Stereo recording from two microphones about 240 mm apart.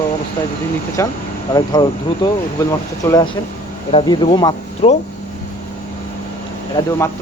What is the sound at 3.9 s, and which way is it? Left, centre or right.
Speech, left.